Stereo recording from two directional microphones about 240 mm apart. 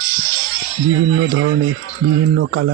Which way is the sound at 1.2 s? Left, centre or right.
Right.